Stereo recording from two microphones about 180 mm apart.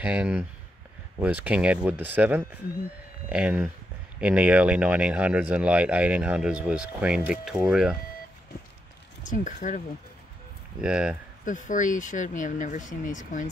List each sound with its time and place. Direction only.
0.0 s speech: 10° right (ahead or behind)
9.2 s speech: 45° left (ahead or behind)
10.8 s speech: 5° right (ahead or behind)
11.4 s speech: 45° left (ahead or behind)